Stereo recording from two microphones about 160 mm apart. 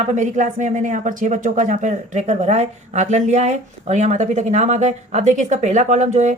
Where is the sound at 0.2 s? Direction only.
50° right (ahead or behind).